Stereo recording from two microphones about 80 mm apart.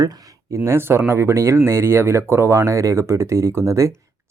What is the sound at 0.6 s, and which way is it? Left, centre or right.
Speech, right.